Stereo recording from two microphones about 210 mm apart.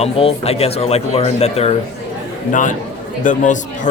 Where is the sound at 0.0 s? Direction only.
30° left (ahead or behind).